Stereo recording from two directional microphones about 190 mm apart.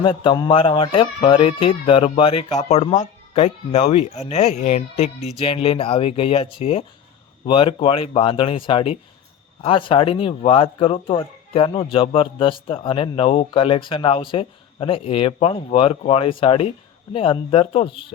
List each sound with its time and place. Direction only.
0.0 s speech: 25° left (ahead or behind)